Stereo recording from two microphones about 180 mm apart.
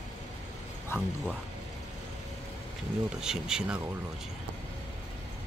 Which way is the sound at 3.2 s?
5° right (ahead or behind).